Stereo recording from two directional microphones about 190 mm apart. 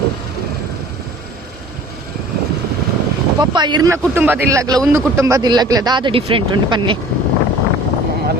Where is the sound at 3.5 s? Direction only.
25° right (ahead or behind).